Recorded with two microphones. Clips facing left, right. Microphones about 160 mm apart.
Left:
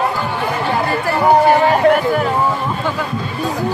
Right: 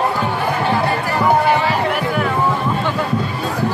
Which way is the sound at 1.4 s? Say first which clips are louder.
Left 5 dB; 45° left (ahead or behind).